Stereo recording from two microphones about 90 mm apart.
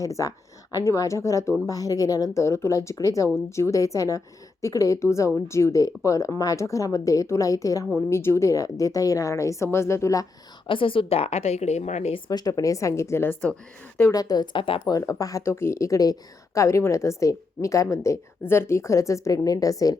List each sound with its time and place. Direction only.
0.0 s a woman's voice: 40° left (ahead or behind)
10.7 s a woman's voice: 75° left (ahead or behind); by 11.4 s 90° left
12.3 s a woman's voice: 45° left (ahead or behind); by 13.3 s 30° left (ahead or behind)
14.1 s a woman's voice: 45° left (ahead or behind)
14.5 s speech: 65° left (ahead or behind)
14.9 s a woman's voice: 40° left (ahead or behind)